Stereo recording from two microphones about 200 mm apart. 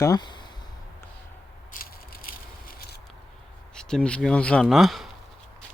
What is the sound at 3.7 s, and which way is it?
Speech, 5° left (ahead or behind).